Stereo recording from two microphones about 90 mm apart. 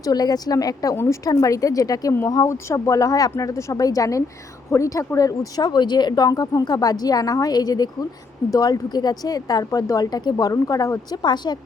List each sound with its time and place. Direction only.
0.0 s speech: 45° left (ahead or behind)
11.2 s speech: 55° left (ahead or behind)